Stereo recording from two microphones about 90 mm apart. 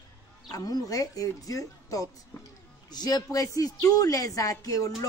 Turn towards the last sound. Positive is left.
turn(degrees=40)  # may be behind; listen again after turning